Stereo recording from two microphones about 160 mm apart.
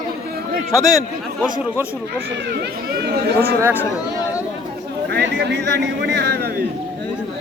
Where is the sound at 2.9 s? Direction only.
85° right.